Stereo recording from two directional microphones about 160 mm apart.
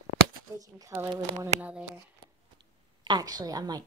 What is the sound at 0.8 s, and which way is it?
Speech, 15° right (ahead or behind).